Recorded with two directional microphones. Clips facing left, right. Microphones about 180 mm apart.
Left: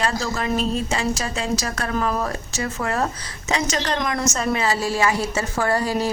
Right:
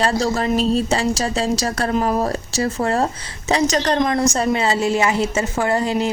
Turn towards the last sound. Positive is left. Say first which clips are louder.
# right 2 dB
turn(degrees=-20)  # may be behind; listen again after turning